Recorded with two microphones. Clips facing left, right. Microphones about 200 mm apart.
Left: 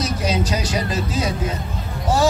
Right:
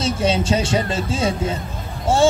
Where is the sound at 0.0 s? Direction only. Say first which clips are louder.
Right 2 dB; 25° right (ahead or behind).